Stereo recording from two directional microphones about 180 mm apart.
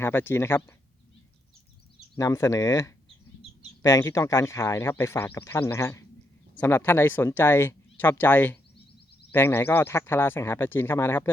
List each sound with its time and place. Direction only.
0.0 s speech: 10° left (ahead or behind)
2.1 s speech: 15° left (ahead or behind)